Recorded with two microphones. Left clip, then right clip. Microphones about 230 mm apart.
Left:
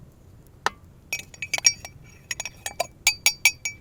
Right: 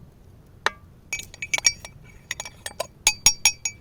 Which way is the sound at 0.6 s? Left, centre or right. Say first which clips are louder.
Right 1 dB; centre.